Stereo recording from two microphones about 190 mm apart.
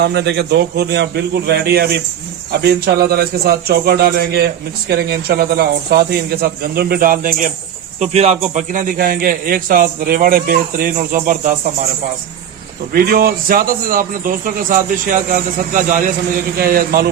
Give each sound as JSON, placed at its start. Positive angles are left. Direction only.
{"t": 0.0, "sound": "a man's voice", "side_deg": -60}
{"t": 7.9, "sound": "a man's voice", "side_deg": -35}
{"t": 12.9, "sound": "a man's voice", "side_deg": -50}